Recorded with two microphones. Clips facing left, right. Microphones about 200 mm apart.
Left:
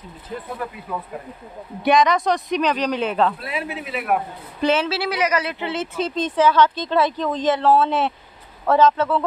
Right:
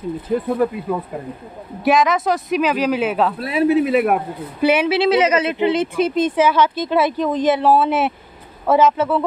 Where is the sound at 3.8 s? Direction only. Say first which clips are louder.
Right 12 dB; 55° right (ahead or behind).